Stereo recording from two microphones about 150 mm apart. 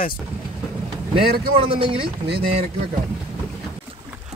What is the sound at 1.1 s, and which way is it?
A man's voice, 35° right (ahead or behind).